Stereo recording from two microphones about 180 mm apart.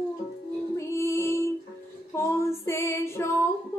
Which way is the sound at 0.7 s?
15° left (ahead or behind).